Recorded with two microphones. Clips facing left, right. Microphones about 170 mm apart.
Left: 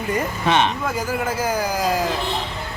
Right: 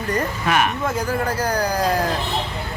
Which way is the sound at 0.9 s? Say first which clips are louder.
Right 1 dB; 5° left (ahead or behind).